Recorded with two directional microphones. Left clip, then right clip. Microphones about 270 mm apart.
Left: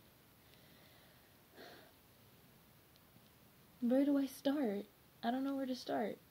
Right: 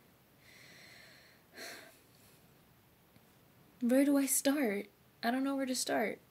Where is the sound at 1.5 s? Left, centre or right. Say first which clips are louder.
Right 9 dB; centre.